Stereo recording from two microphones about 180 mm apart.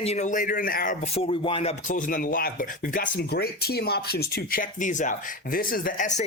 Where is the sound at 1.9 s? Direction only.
45° left (ahead or behind).